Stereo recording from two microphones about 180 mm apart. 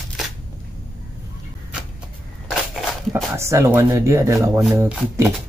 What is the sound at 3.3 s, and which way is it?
Speech, 15° right (ahead or behind).